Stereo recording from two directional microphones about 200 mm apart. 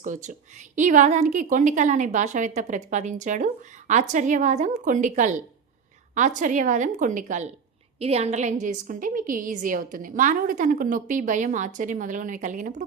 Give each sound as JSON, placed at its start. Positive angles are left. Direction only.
{"t": 0.0, "sound": "a woman's voice", "side_deg": -40}